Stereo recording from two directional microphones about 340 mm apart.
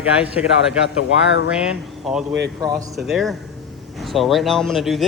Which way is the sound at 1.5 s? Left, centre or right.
Centre.